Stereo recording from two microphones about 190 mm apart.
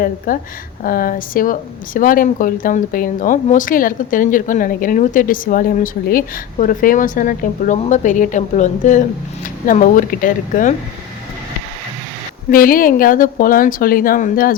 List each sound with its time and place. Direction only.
0.3 s speech: 45° left (ahead or behind)
12.5 s speech: 50° left (ahead or behind)